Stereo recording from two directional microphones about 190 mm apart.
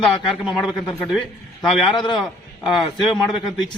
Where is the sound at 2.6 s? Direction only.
Centre (ahead or behind).